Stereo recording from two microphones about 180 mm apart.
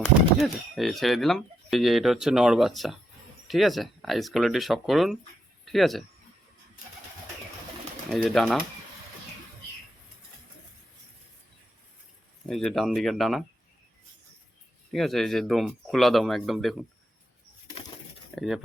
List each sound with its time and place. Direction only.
0.3 s speech: centre (ahead or behind)
8.1 s speech: centre (ahead or behind)
12.5 s speech: centre (ahead or behind)
14.9 s speech: centre (ahead or behind)
18.3 s speech: centre (ahead or behind)